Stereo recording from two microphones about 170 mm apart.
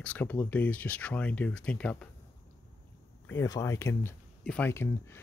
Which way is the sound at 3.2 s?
15° left (ahead or behind).